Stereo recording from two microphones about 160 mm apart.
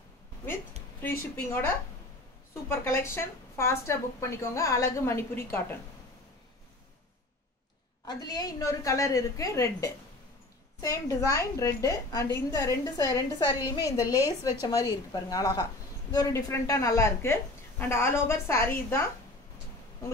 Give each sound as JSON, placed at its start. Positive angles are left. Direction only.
{"t": 1.3, "sound": "speech", "side_deg": 15}
{"t": 8.1, "sound": "a woman's voice", "side_deg": 25}